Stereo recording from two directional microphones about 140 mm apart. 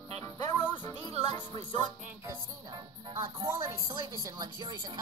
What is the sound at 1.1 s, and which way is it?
Music, 50° right (ahead or behind).